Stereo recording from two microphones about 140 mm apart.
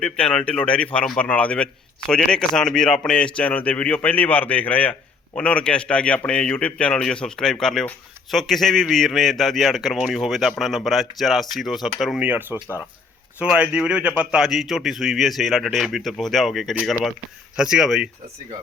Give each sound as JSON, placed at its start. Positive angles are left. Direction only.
{"t": 0.0, "sound": "a man's voice", "side_deg": 5}